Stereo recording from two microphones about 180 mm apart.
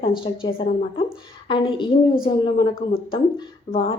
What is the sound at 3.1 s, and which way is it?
Speech, 30° left (ahead or behind).